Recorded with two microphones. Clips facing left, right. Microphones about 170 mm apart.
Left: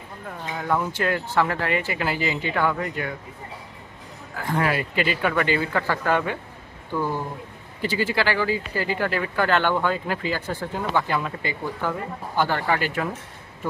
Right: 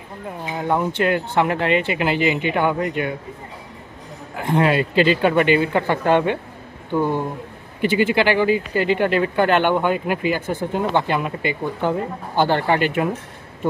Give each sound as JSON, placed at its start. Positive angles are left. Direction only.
{"t": 0.6, "sound": "speech", "side_deg": -25}
{"t": 4.4, "sound": "speech", "side_deg": -25}